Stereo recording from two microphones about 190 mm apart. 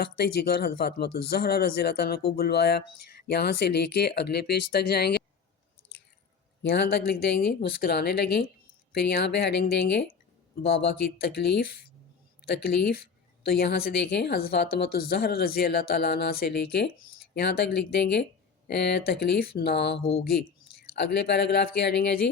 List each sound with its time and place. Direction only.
0.0 s a woman's voice: 55° left (ahead or behind)
6.6 s a woman's voice: 60° left (ahead or behind)